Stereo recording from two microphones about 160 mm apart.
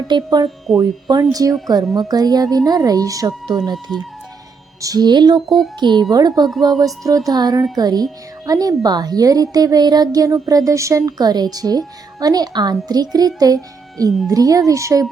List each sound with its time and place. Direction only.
0.1 s speech: 25° right (ahead or behind)